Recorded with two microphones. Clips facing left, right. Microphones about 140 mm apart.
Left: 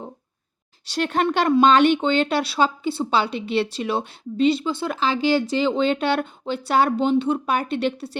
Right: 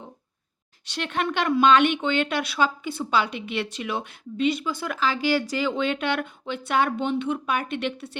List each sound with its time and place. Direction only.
0.9 s speech: 40° left (ahead or behind)